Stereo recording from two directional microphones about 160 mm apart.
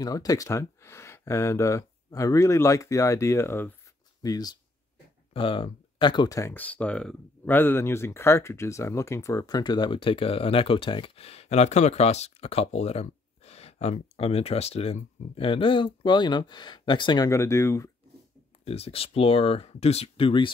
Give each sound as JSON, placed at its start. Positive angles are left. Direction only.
{"t": 0.0, "sound": "speech", "side_deg": 25}
{"t": 17.3, "sound": "speech", "side_deg": 20}
{"t": 18.6, "sound": "speech", "side_deg": 40}